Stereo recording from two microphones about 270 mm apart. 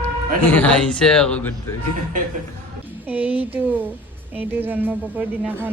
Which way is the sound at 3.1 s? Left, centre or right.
Centre.